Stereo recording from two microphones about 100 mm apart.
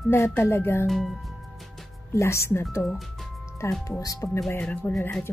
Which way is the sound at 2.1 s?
30° left (ahead or behind).